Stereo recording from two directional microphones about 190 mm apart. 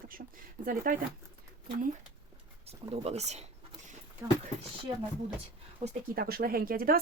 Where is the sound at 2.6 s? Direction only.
30° right (ahead or behind).